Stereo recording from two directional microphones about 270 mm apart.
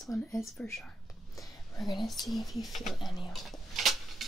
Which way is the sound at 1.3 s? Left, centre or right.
Centre.